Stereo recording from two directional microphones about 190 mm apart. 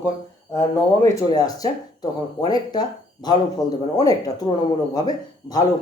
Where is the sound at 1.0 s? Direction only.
20° left (ahead or behind).